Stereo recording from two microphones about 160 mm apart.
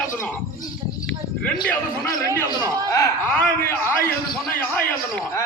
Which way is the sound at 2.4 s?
20° right (ahead or behind).